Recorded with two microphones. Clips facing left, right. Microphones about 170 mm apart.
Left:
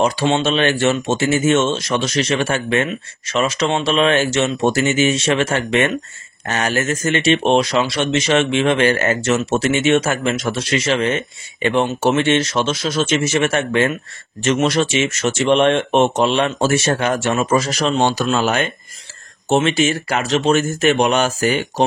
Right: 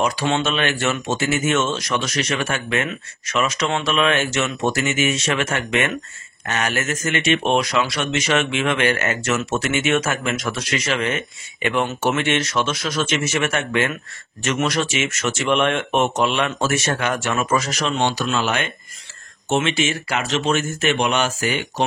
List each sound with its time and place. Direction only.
0.0 s speech: 25° left (ahead or behind)